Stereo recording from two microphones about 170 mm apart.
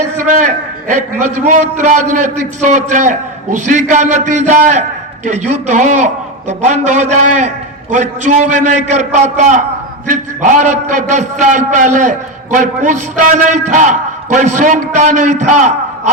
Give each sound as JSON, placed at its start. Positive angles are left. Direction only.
{"t": 0.3, "sound": "a man's voice", "side_deg": -45}